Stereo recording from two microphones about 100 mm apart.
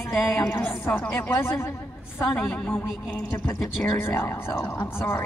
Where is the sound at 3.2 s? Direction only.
25° left (ahead or behind).